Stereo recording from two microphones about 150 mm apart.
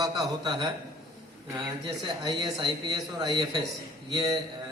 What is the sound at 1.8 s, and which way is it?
Speech, 25° right (ahead or behind).